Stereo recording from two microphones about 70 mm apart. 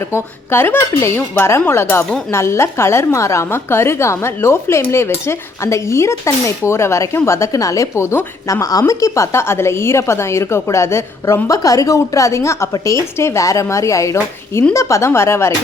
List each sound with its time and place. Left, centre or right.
0.1 s a woman's voice: left
8.9 s a woman's voice: left
11.4 s a woman's voice: left